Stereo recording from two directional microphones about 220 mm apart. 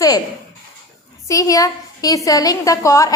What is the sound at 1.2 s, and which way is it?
A woman's voice, 15° left (ahead or behind).